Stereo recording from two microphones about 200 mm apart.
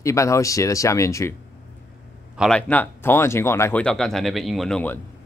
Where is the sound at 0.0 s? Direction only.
15° left (ahead or behind).